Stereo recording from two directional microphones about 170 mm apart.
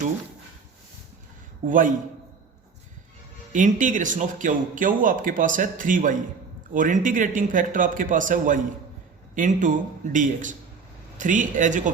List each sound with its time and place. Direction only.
1.6 s speech: 50° right (ahead or behind)
3.5 s speech: 50° right (ahead or behind)